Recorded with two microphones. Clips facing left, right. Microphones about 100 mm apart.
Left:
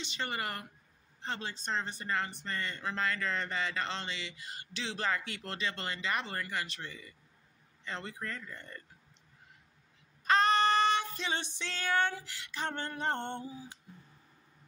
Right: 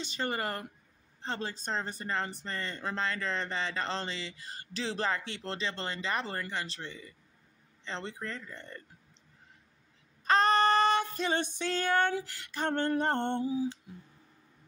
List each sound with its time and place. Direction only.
0.0 s speech: 40° right (ahead or behind)
10.2 s female singing: 40° right (ahead or behind)
12.3 s a sound: 45° right (ahead or behind)